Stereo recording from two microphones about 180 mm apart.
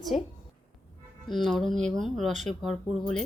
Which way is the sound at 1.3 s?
Centre (ahead or behind).